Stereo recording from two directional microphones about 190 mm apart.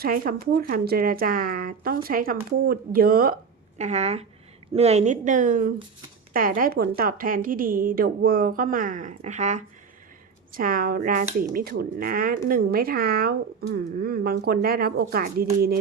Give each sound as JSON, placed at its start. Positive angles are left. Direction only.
{"t": 0.0, "sound": "a woman's voice", "side_deg": -50}
{"t": 3.8, "sound": "a woman's voice", "side_deg": -35}